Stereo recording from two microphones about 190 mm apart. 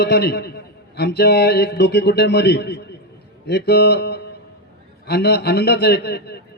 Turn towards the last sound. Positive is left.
turn(degrees=60)  # may be behind; listen again after turning